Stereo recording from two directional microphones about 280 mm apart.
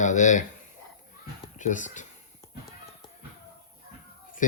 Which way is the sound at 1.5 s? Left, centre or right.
Left.